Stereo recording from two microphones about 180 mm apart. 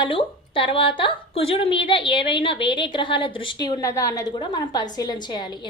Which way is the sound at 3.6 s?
15° left (ahead or behind).